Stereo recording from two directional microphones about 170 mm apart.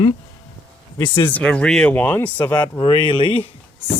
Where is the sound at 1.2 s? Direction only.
10° left (ahead or behind).